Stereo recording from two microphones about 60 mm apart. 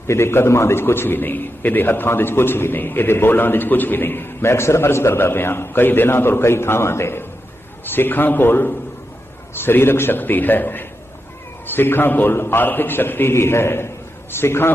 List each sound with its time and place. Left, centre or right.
0.1 s a man's voice: left